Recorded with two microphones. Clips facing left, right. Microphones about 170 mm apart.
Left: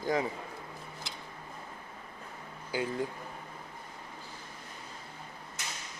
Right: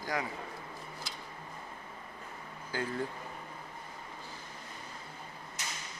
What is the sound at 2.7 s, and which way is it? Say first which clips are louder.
Speech: left 3 dB; 10° left (ahead or behind).